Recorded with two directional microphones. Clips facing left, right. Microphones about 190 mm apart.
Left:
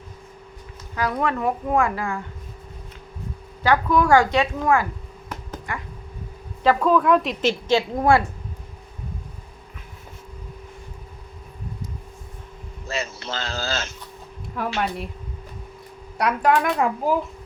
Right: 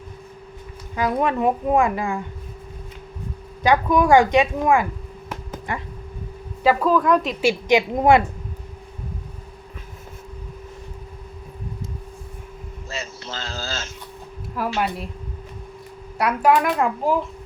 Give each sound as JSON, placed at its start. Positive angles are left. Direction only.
{"t": 0.9, "sound": "a woman's voice", "side_deg": -20}
{"t": 3.6, "sound": "a woman's voice", "side_deg": -15}
{"t": 6.6, "sound": "a child's voice", "side_deg": -5}
{"t": 7.4, "sound": "speech", "side_deg": -15}
{"t": 12.9, "sound": "a sound", "side_deg": 65}
{"t": 14.8, "sound": "a child's voice", "side_deg": 0}
{"t": 16.1, "sound": "a child's voice", "side_deg": -5}